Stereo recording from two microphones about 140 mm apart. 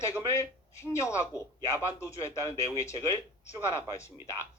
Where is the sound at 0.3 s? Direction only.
20° left (ahead or behind).